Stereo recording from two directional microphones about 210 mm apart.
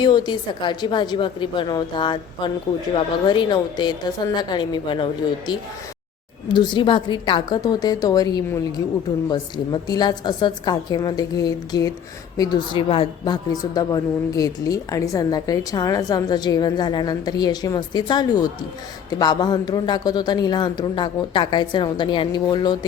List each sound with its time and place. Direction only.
0.0 s a woman's voice: 20° left (ahead or behind)
6.5 s a woman's voice: 20° left (ahead or behind)